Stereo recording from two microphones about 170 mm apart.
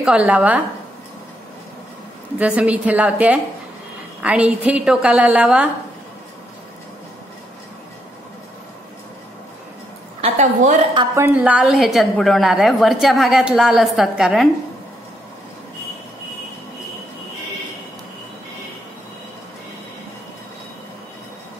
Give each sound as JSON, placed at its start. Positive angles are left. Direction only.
{"t": 0.0, "sound": "a woman's voice", "side_deg": -5}
{"t": 2.3, "sound": "a woman's voice", "side_deg": -5}
{"t": 10.2, "sound": "a woman's voice", "side_deg": -45}
{"t": 11.1, "sound": "a woman's voice", "side_deg": -10}